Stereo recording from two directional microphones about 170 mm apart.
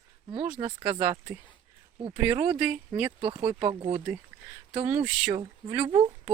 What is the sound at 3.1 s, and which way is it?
Speech, 30° right (ahead or behind).